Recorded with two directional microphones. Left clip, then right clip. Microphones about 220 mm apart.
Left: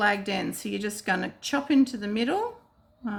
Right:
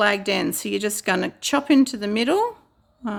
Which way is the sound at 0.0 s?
50° right (ahead or behind).